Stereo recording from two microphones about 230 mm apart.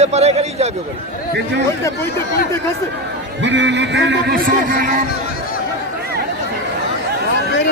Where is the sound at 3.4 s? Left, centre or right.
Right.